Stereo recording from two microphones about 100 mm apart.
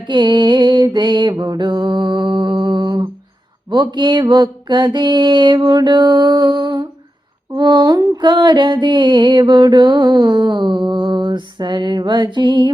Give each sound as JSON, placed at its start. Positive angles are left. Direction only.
{"t": 0.1, "sound": "mantra", "side_deg": -45}
{"t": 3.7, "sound": "music", "side_deg": -50}